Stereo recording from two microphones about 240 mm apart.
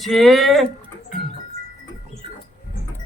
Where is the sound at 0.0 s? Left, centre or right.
Centre.